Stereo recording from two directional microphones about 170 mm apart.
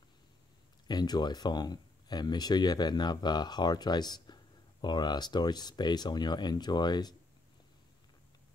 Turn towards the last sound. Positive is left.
turn(degrees=25)  # may be behind; listen again after turning